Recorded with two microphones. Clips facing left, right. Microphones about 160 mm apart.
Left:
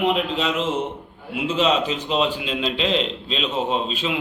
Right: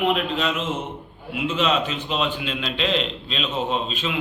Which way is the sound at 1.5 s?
30° left (ahead or behind).